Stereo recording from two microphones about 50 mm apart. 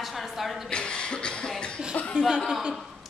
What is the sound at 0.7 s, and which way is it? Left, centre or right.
Cough, centre.